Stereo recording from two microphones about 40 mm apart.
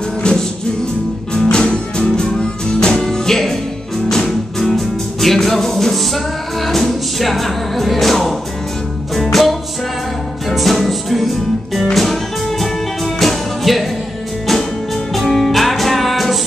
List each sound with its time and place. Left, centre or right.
0.2 s music: centre
1.5 s music: left
3.0 s music: centre
15.1 s music: centre